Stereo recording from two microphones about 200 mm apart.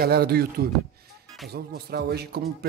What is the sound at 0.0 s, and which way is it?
Speech, 50° right (ahead or behind).